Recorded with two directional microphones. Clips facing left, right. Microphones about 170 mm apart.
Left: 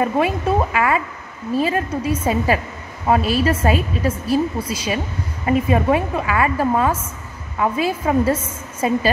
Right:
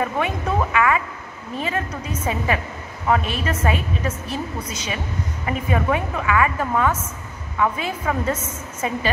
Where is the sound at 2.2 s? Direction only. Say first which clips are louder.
Left 1 dB; 35° left (ahead or behind).